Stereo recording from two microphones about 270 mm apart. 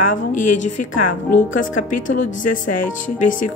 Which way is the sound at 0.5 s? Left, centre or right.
Left.